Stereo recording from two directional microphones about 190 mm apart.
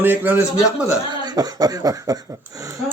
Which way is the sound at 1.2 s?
20° right (ahead or behind).